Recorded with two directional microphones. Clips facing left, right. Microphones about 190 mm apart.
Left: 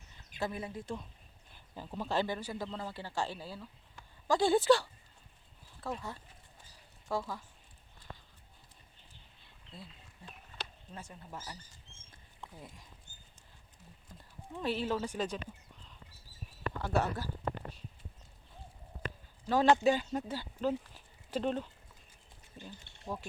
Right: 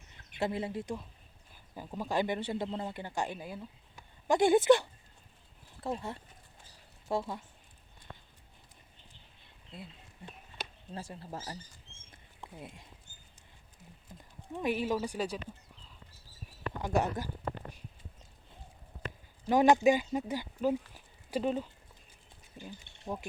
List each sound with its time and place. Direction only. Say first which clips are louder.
0.3 s speech: right 4 dB; 25° right (ahead or behind)
1.7 s speech: right 1 dB; 10° right (ahead or behind)
9.7 s speech: right 3 dB; 25° right (ahead or behind)
12.4 s speech: right 3 dB; 20° right (ahead or behind)
14.1 s a sound: right 3 dB; 15° right (ahead or behind)
14.5 s speech: right 2 dB; 15° right (ahead or behind)
16.7 s speech: right 2 dB; 15° right (ahead or behind)
19.5 s speech: right 3 dB; 15° right (ahead or behind)